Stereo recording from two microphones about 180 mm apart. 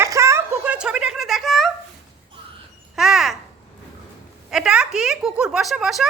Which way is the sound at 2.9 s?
Centre (ahead or behind).